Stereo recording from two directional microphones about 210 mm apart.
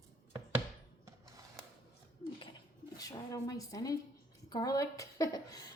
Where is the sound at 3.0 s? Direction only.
15° left (ahead or behind).